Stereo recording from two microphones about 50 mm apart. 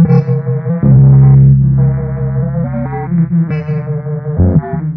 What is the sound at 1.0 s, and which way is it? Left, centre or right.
Music, centre.